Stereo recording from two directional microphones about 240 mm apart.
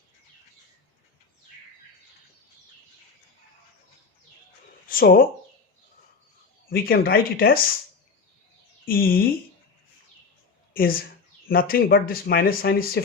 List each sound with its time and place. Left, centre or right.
4.9 s speech: left
6.7 s speech: left
8.8 s speech: left
10.8 s speech: left